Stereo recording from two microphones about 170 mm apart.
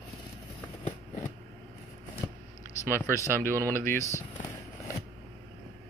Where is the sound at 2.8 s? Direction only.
15° left (ahead or behind).